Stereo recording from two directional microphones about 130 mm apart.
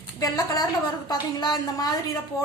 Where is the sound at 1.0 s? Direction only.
30° left (ahead or behind).